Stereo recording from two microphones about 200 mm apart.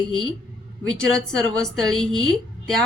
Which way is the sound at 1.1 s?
Centre (ahead or behind).